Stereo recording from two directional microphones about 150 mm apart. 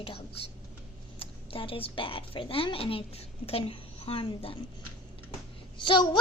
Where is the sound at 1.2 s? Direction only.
40° left (ahead or behind).